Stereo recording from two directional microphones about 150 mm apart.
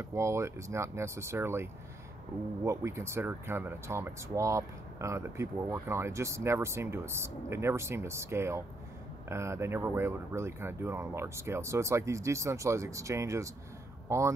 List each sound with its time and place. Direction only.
0.0 s speech: 20° right (ahead or behind)